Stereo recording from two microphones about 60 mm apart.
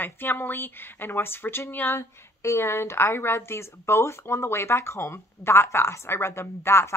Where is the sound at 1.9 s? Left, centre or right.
Left.